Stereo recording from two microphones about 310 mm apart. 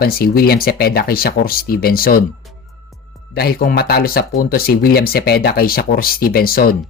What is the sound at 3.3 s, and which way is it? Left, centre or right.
Speech, left.